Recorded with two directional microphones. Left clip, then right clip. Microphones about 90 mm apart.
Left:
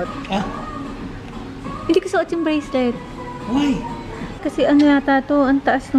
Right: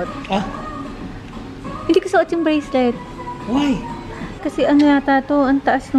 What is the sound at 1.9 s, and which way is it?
A woman's voice, 15° right (ahead or behind).